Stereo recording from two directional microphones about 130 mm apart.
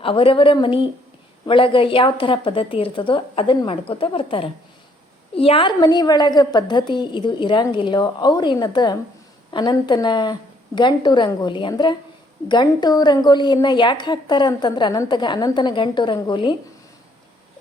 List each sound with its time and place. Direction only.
0.0 s a woman's voice: 45° left (ahead or behind)